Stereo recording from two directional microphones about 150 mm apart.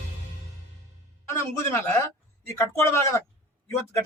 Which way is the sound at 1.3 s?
15° left (ahead or behind).